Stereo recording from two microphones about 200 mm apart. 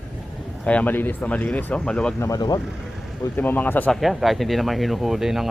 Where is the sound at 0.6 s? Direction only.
5° left (ahead or behind).